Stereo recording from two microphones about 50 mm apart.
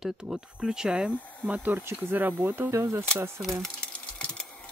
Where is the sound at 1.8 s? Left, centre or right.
Right.